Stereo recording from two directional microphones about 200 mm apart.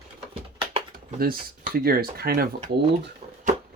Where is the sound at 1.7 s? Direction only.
50° right (ahead or behind).